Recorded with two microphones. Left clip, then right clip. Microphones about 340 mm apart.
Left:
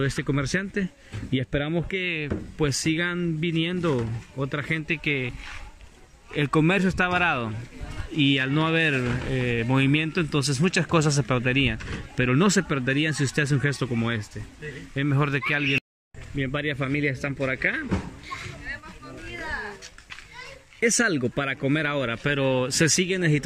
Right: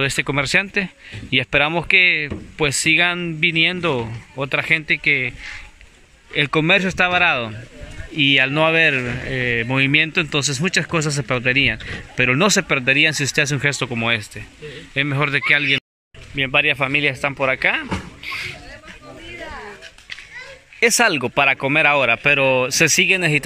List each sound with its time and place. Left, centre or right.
0.0 s speech: centre
1.3 s speech: right
1.9 s speech: centre
6.3 s speech: centre
16.9 s speech: right
17.4 s speech: centre
20.8 s speech: centre